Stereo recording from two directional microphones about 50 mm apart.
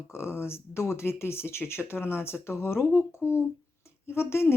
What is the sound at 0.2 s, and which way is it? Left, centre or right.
Speech, left.